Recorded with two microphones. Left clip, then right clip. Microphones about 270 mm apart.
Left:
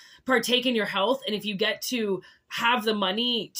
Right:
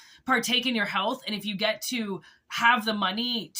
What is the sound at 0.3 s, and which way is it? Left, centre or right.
Speech, centre.